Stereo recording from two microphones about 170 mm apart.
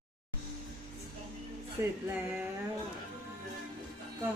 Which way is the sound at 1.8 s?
15° right (ahead or behind).